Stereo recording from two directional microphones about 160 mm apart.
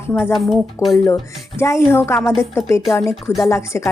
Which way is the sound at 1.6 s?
15° left (ahead or behind).